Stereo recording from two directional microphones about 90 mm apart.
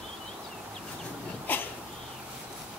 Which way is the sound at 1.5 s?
20° left (ahead or behind).